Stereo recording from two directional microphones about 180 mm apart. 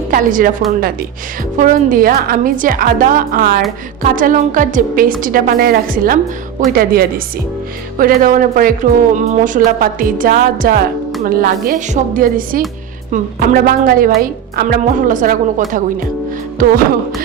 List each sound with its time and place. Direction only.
0.1 s speech: 50° right (ahead or behind)
1.5 s speech: 50° right (ahead or behind)